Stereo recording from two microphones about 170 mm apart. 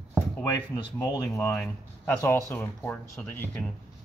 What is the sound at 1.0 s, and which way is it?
Speech, 20° left (ahead or behind).